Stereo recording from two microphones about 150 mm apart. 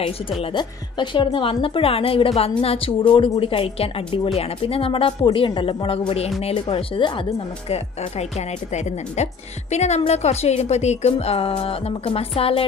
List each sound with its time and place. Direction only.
0.4 s a woman's voice: 35° left (ahead or behind)